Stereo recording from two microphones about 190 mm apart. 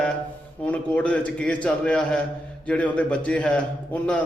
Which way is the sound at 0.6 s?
5° left (ahead or behind).